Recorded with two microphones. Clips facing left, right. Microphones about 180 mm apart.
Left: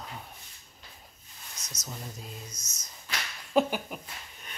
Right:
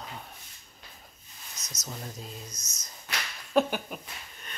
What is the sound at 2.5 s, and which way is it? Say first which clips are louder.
Speech: right 1 dB; 25° left (ahead or behind).